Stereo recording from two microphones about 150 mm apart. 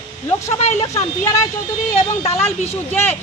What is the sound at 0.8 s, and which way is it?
Speech, 20° left (ahead or behind).